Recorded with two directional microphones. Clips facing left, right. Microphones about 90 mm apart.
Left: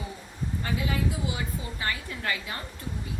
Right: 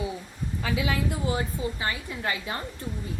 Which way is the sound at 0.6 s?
90° right.